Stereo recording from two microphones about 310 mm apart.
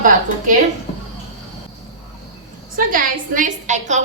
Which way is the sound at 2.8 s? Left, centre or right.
Right.